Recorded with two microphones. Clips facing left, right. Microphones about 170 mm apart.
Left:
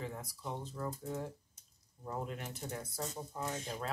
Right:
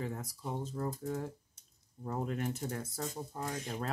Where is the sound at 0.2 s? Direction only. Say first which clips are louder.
Right 3 dB; 45° right (ahead or behind).